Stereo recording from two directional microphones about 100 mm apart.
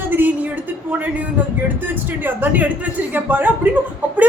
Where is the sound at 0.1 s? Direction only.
20° right (ahead or behind).